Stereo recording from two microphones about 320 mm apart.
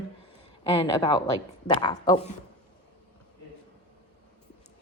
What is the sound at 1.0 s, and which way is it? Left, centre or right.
Speech, centre.